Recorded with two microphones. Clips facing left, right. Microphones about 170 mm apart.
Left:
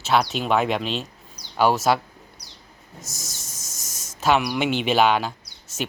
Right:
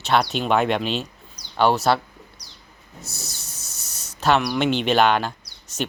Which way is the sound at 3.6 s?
90° left.